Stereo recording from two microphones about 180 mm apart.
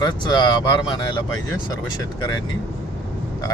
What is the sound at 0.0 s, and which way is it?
Speech, 20° left (ahead or behind).